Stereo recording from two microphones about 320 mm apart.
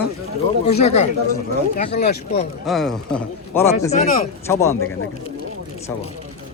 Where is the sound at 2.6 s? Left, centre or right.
Centre.